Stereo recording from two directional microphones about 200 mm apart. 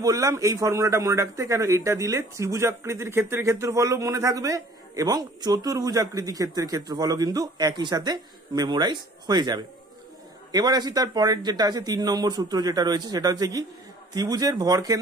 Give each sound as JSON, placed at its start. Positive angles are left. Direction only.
{"t": 0.0, "sound": "a man's voice", "side_deg": -15}